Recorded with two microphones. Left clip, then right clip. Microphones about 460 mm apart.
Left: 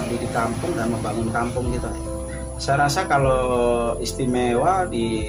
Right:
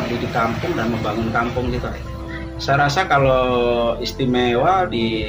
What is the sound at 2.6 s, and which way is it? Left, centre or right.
Speech, left.